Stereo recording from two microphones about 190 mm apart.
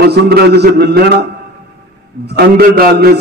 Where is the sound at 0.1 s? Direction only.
60° right (ahead or behind).